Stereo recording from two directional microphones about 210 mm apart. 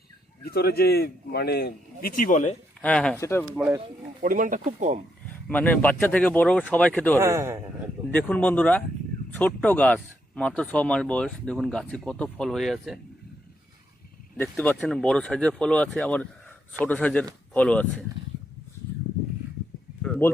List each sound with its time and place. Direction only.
0.4 s a man's voice: 45° left (ahead or behind)
2.8 s speech: 5° left (ahead or behind)
4.2 s speech: 40° right (ahead or behind)
5.3 s speech: 5° left (ahead or behind)
7.2 s a man's voice: 15° right (ahead or behind)
8.1 s speech: 5° left (ahead or behind)
14.3 s speech: 10° left (ahead or behind)
20.0 s a sound: 5° left (ahead or behind)